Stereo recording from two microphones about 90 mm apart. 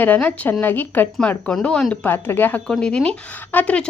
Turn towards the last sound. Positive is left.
turn(degrees=15)  # may be behind; listen again after turning